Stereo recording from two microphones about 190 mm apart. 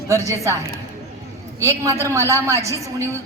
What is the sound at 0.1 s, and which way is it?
Speech, 15° right (ahead or behind).